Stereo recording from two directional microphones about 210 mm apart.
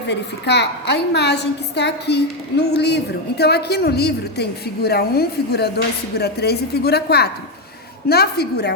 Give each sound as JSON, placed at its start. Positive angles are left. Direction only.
{"t": 0.1, "sound": "a woman's voice", "side_deg": 55}